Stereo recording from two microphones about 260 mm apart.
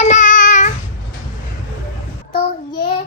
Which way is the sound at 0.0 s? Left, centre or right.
Left.